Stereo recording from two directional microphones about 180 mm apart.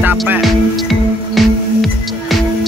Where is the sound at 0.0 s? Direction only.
10° right (ahead or behind).